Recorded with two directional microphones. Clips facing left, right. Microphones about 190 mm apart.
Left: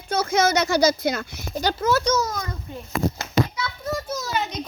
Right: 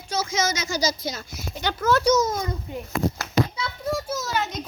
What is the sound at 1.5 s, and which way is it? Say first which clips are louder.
Speech: left 4 dB; 40° left (ahead or behind).